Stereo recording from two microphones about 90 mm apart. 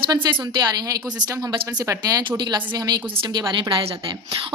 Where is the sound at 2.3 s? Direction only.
50° right (ahead or behind).